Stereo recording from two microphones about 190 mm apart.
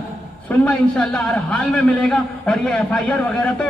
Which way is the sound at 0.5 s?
5° left (ahead or behind).